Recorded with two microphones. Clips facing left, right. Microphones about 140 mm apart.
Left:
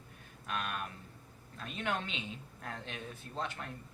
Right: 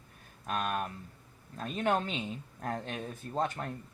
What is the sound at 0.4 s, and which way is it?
Speech, 40° right (ahead or behind).